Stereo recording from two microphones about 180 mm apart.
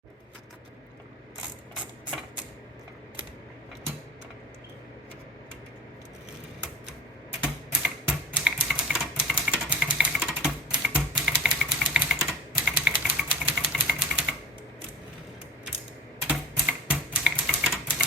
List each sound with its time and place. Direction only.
7.7 s typewriter: 5° right (ahead or behind)
16.3 s typing: 5° right (ahead or behind)